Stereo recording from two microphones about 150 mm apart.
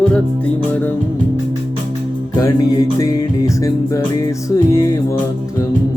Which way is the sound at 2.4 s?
20° left (ahead or behind).